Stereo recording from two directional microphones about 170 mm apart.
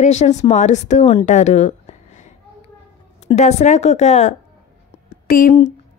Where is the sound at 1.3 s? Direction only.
45° left (ahead or behind).